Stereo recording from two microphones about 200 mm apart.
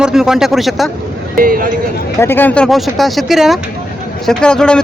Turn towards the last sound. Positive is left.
turn(degrees=5)  # may be behind; listen again after turning